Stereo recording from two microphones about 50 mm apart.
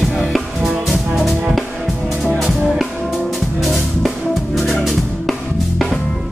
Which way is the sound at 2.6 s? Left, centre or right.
Centre.